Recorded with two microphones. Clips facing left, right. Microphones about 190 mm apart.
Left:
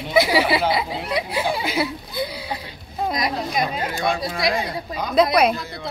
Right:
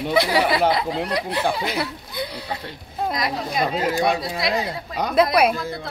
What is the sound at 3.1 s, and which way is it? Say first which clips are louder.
Speech: left 2 dB; 20° left (ahead or behind).